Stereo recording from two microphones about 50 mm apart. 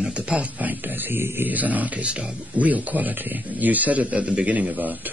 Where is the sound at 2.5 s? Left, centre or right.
Right.